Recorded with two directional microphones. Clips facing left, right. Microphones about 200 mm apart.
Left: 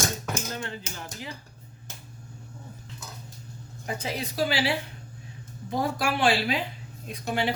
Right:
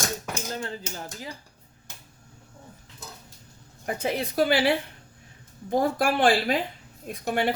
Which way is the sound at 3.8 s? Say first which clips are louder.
Right 4 dB; 55° right (ahead or behind).